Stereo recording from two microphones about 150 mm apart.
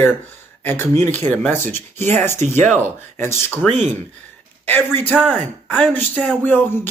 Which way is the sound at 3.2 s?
15° left (ahead or behind).